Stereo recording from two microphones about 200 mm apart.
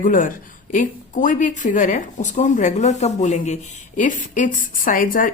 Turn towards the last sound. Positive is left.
turn(degrees=45)  # may be behind; listen again after turning